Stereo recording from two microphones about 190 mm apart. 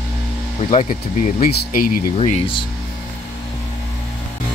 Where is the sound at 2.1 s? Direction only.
35° left (ahead or behind).